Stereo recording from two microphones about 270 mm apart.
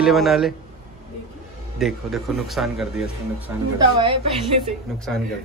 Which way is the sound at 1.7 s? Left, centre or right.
Centre.